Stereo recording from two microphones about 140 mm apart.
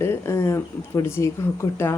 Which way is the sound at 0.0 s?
20° left (ahead or behind).